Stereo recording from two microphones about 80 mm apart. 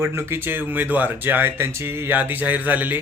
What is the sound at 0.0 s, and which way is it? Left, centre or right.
Speech, right.